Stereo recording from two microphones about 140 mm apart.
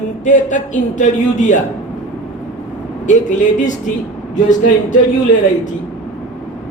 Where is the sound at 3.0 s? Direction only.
65° left (ahead or behind).